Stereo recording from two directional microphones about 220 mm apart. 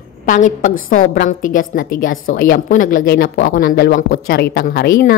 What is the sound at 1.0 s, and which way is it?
A woman's voice, 40° left (ahead or behind).